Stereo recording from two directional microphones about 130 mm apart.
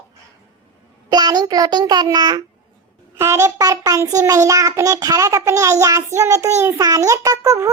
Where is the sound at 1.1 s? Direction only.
30° right (ahead or behind).